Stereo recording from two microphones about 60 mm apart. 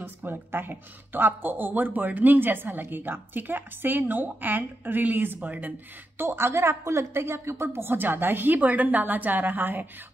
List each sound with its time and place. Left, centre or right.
0.0 s speech: right
6.1 s speech: right